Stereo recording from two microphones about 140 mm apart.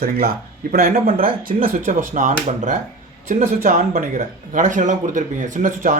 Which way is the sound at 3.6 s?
80° right.